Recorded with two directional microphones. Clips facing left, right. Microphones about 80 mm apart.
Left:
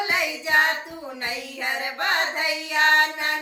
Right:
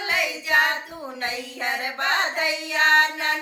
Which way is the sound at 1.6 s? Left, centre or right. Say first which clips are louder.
Right 1 dB; right.